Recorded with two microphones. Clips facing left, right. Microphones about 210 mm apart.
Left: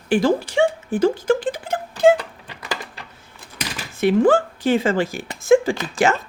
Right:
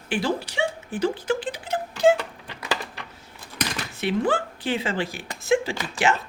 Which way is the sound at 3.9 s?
45° left (ahead or behind).